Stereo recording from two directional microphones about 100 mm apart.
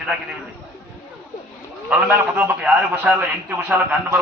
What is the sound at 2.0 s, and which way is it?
A man's voice, 15° right (ahead or behind).